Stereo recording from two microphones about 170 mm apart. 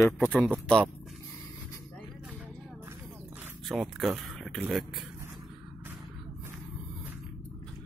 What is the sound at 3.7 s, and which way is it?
Speech, centre (ahead or behind).